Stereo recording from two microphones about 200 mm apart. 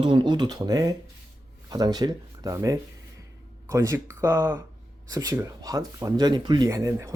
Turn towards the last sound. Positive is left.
turn(degrees=-15)  # may be behind; listen again after turning